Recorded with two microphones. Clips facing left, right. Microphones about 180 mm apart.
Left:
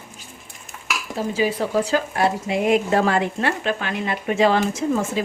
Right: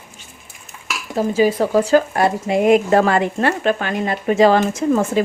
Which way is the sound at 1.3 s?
45° right (ahead or behind).